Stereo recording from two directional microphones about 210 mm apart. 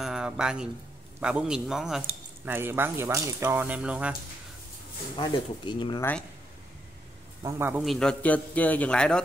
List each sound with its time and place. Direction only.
0.0 s a man's voice: 5° right (ahead or behind)
5.1 s speech: 20° left (ahead or behind)
7.4 s speech: 10° right (ahead or behind)
7.8 s a man's voice: centre (ahead or behind)